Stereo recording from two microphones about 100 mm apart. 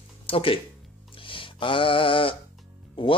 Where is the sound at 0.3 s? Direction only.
65° left (ahead or behind).